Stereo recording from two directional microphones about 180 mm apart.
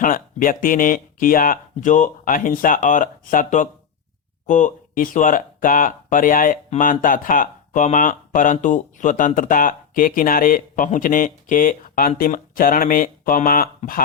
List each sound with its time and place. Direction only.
0.0 s speech: 50° left (ahead or behind)